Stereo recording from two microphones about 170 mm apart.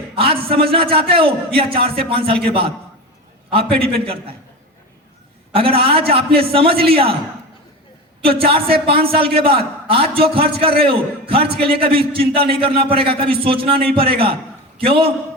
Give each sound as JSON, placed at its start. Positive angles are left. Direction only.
{"t": 0.2, "sound": "a man's voice", "side_deg": -30}
{"t": 5.5, "sound": "a man's voice", "side_deg": -35}
{"t": 8.4, "sound": "a man's voice", "side_deg": -35}